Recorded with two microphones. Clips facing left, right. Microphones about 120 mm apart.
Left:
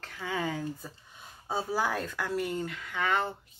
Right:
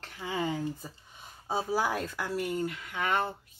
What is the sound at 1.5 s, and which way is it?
Speech, 10° right (ahead or behind).